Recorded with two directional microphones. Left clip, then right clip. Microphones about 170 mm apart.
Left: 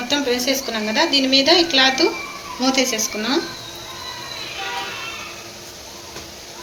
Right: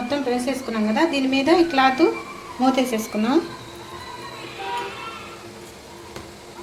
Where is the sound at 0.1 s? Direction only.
40° right (ahead or behind).